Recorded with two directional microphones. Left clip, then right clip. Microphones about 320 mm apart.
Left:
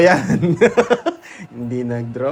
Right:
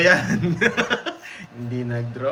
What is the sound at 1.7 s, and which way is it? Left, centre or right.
Speech, left.